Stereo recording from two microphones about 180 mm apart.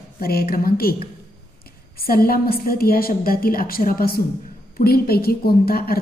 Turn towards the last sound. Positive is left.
turn(degrees=55)  # may be behind; listen again after turning